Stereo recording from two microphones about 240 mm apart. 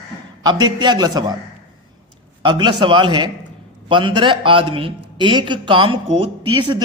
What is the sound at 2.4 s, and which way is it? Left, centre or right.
A man's voice, centre.